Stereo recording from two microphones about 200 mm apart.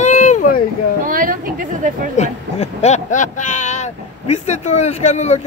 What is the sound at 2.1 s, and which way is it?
Speech, 35° left (ahead or behind).